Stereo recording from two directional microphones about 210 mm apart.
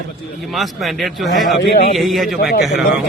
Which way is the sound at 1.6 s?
45° left (ahead or behind).